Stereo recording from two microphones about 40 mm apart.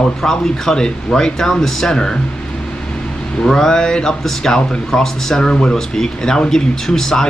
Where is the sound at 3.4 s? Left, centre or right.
Centre.